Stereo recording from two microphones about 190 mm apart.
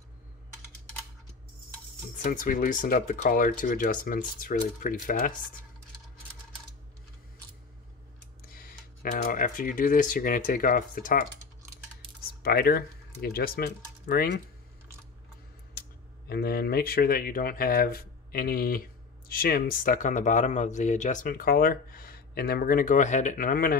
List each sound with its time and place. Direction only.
2.2 s speech: 45° left (ahead or behind)
8.5 s speech: 45° left (ahead or behind)
12.4 s speech: 50° left (ahead or behind)
16.3 s speech: 55° left (ahead or behind)